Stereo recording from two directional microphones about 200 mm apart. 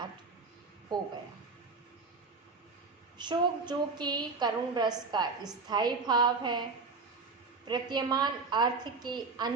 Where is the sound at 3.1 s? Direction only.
20° right (ahead or behind).